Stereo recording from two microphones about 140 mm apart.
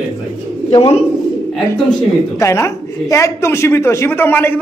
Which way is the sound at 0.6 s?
45° left (ahead or behind).